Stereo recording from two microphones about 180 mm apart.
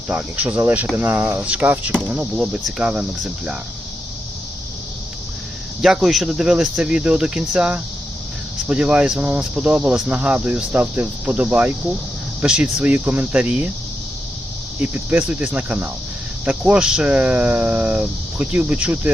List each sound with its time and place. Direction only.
0.1 s speech: 5° right (ahead or behind)
5.8 s speech: centre (ahead or behind)
14.8 s speech: 10° right (ahead or behind)